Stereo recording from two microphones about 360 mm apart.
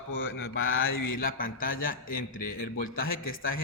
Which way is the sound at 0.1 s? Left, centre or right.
Left.